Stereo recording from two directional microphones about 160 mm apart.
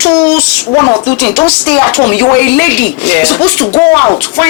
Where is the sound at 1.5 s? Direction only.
10° left (ahead or behind).